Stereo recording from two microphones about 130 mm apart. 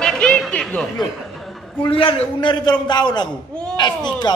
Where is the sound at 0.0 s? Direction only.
5° left (ahead or behind).